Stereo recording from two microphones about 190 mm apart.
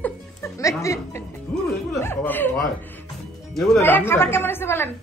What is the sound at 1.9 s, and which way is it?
Chuckle, 10° left (ahead or behind).